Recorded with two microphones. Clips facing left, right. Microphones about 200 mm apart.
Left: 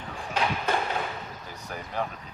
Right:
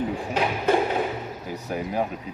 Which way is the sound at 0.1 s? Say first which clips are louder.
Right 4 dB; 10° right (ahead or behind).